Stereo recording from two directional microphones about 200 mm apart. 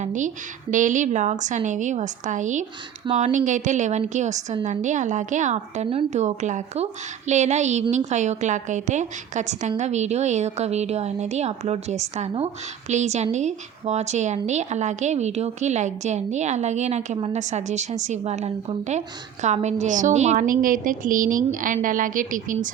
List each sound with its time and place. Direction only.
0.0 s a woman's voice: 40° right (ahead or behind)